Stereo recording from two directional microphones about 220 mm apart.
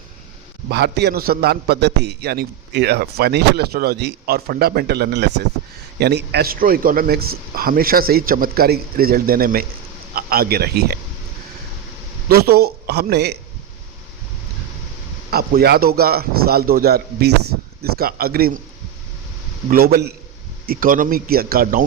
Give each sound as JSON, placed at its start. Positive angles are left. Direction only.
{"t": 0.7, "sound": "a man's voice", "side_deg": -50}
{"t": 12.3, "sound": "a man's voice", "side_deg": -45}
{"t": 15.3, "sound": "a man's voice", "side_deg": -45}
{"t": 19.7, "sound": "a man's voice", "side_deg": -45}